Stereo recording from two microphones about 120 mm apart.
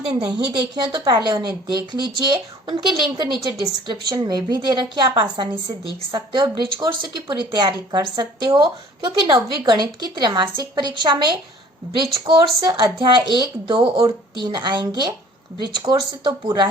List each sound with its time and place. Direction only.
0.3 s speech: 35° right (ahead or behind)